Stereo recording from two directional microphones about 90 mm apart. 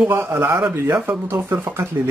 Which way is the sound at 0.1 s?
25° right (ahead or behind).